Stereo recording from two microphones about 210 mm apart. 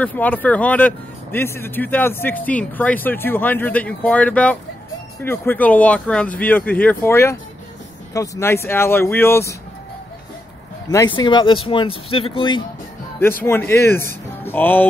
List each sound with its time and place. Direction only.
0.0 s speech: 10° left (ahead or behind)
11.1 s speech: 20° left (ahead or behind)
13.4 s speech: 10° left (ahead or behind)